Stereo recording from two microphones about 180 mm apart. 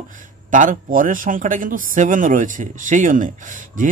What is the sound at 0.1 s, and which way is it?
Speech, 45° right (ahead or behind).